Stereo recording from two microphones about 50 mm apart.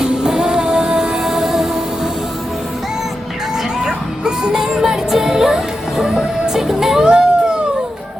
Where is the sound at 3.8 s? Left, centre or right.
Centre.